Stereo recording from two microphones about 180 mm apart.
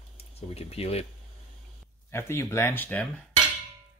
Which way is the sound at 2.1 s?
15° left (ahead or behind).